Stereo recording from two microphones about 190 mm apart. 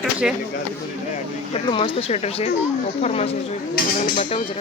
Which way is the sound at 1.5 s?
30° left (ahead or behind).